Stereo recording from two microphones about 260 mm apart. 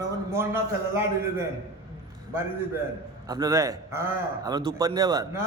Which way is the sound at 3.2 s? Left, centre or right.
Centre.